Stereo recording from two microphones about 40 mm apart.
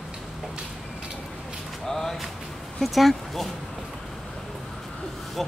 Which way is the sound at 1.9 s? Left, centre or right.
Centre.